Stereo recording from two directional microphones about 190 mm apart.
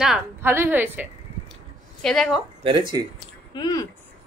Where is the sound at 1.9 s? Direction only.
5° left (ahead or behind).